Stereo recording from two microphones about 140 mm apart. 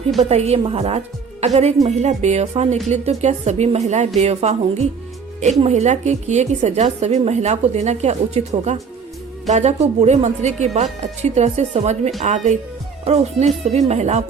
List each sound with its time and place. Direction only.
0.2 s a woman's voice: 50° right (ahead or behind)